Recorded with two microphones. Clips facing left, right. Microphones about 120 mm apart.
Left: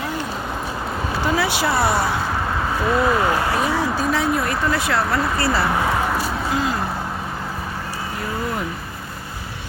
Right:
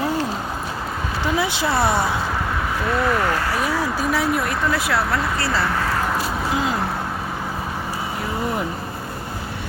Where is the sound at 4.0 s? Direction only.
5° right (ahead or behind).